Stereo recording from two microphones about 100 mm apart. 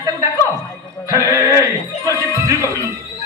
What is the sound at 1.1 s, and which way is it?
A man's voice, 30° right (ahead or behind).